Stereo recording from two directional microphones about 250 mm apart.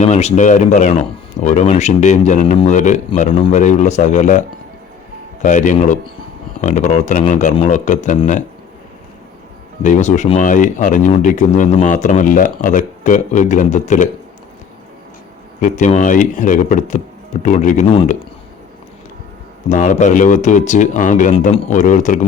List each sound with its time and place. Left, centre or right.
0.0 s speech: left
9.8 s speech: left
15.6 s speech: left
19.6 s speech: left